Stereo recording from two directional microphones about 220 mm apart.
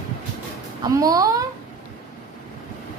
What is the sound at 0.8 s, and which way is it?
Speech, 15° right (ahead or behind).